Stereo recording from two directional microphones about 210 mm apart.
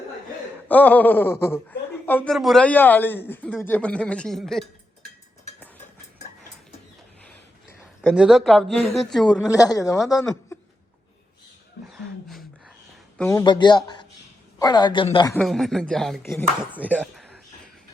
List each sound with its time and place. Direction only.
0.7 s speech: 5° left (ahead or behind)
8.1 s speech: 5° right (ahead or behind)
9.6 s speech: 15° left (ahead or behind)
11.9 s a sound: centre (ahead or behind)
13.1 s speech: 10° left (ahead or behind)
13.4 s speech: 20° left (ahead or behind)
15.3 s speech: 5° left (ahead or behind)